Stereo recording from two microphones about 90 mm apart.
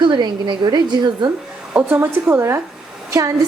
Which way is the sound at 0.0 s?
55° right (ahead or behind).